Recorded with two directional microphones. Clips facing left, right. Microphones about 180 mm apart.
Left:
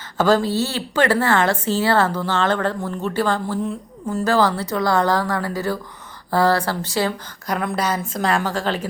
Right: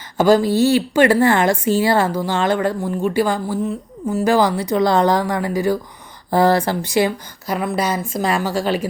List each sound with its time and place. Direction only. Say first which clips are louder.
0.2 s speech: right 4 dB; 10° right (ahead or behind)
7.4 s speech: right 2 dB; 5° right (ahead or behind)